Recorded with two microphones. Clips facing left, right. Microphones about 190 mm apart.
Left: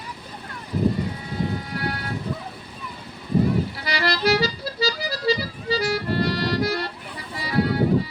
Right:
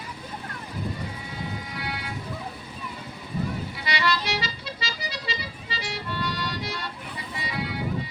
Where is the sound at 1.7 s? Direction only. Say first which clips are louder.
Left 6 dB; 40° left (ahead or behind).